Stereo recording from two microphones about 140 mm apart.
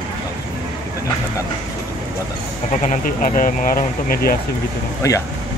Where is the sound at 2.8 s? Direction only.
65° left (ahead or behind); by 4.4 s 90° left.